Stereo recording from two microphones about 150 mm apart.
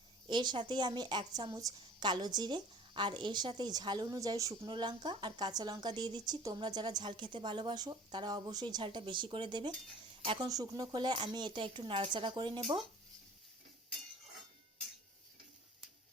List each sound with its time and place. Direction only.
0.3 s a woman's voice: 30° right (ahead or behind)